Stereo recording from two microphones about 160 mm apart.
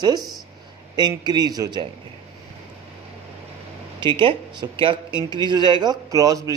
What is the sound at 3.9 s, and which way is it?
Speech, 30° right (ahead or behind).